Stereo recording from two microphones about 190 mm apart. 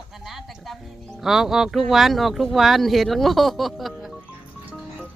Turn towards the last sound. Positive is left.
turn(degrees=0)  # may be behind; listen again after turning